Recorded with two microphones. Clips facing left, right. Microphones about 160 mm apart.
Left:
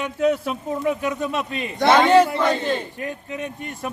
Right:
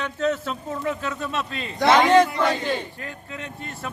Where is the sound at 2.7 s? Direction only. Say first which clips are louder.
Left 4 dB; 20° left (ahead or behind).